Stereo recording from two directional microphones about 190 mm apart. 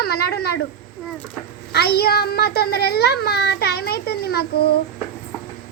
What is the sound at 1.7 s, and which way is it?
A child's voice, 55° left (ahead or behind).